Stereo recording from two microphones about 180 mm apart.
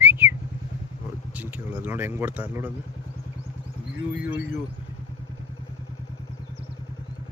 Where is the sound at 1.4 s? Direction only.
10° right (ahead or behind).